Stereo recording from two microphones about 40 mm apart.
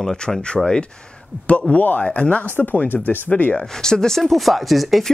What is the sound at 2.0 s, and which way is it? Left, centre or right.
Speech, left.